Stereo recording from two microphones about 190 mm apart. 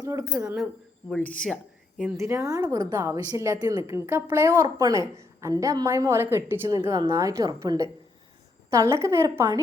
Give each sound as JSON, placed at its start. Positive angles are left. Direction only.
{"t": 0.0, "sound": "speech", "side_deg": -15}
{"t": 2.1, "sound": "a woman's voice", "side_deg": -15}